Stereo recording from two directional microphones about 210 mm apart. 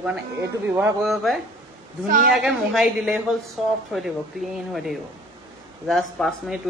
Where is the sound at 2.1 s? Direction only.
40° right (ahead or behind).